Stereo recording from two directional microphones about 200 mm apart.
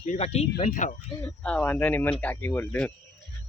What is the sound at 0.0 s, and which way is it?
Speech, 35° left (ahead or behind).